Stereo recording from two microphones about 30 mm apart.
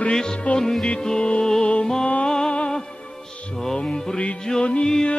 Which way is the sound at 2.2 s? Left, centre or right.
Left.